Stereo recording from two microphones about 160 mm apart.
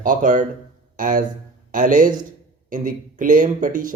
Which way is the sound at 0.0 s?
55° right (ahead or behind).